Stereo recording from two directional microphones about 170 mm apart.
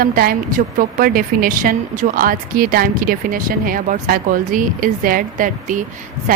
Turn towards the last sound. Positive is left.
turn(degrees=-55)  # may be behind; listen again after turning